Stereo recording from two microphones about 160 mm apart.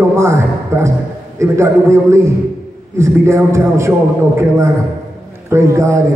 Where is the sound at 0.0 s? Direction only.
15° right (ahead or behind).